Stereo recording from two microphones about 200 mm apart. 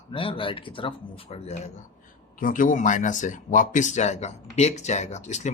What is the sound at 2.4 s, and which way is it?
Speech, 40° left (ahead or behind).